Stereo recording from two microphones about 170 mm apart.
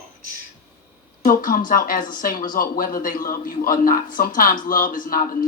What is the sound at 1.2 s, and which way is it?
Speech, 55° left (ahead or behind).